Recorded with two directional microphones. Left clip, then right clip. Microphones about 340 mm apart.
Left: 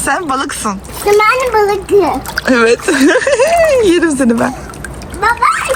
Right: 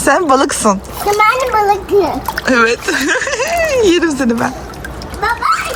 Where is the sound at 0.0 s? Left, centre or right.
Centre.